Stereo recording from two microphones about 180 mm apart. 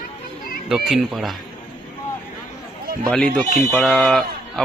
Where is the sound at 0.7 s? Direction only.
Centre (ahead or behind).